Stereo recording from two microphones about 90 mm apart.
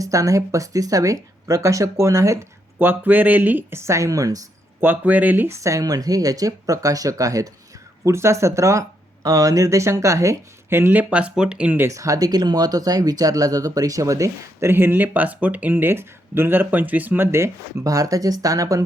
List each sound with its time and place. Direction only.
0.0 s speech: 35° right (ahead or behind)
2.7 s speech: 20° right (ahead or behind); by 4.4 s 40° right (ahead or behind)
4.8 s speech: 20° right (ahead or behind)
5.5 s speech: 35° right (ahead or behind); by 11.9 s 20° right (ahead or behind)
11.9 s speech: 40° right (ahead or behind)
14.7 s speech: 25° right (ahead or behind); by 18.9 s 40° right (ahead or behind)